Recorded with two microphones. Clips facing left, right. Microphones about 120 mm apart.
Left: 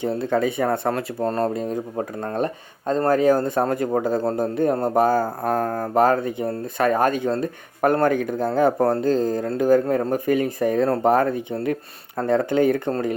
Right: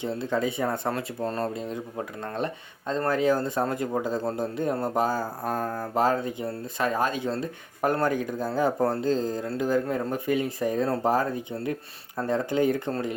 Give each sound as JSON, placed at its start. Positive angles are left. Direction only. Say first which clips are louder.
{"t": 0.0, "sound": "speech", "louder": "left 6 dB", "side_deg": 55}